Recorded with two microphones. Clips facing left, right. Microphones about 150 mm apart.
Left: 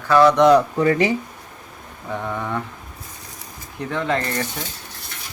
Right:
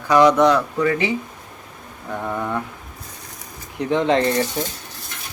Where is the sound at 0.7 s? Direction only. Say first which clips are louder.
Left 2 dB; 35° left (ahead or behind).